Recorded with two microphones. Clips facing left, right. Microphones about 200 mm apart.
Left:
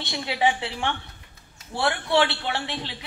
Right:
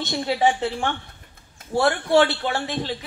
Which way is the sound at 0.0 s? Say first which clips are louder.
Right 4 dB; 45° right (ahead or behind).